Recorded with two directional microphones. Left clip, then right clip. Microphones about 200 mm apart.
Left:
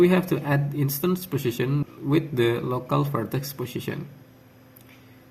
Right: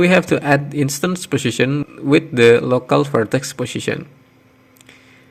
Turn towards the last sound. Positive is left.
turn(degrees=-40)  # may be behind; listen again after turning